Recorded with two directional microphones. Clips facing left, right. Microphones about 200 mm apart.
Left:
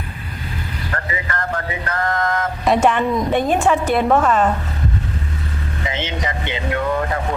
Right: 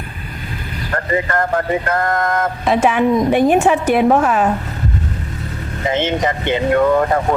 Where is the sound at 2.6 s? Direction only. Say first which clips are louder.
Right 2 dB; 5° right (ahead or behind).